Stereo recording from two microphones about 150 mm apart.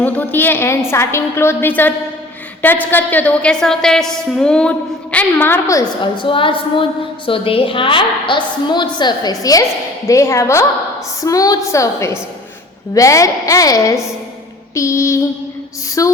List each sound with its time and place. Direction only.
0.0 s a woman's voice: 10° left (ahead or behind)
6.1 s a woman's voice: 35° left (ahead or behind)